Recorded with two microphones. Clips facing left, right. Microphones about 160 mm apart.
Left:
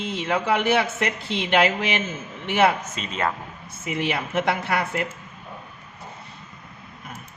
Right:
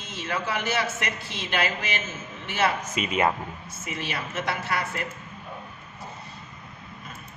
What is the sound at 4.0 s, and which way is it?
Speech, 60° left (ahead or behind).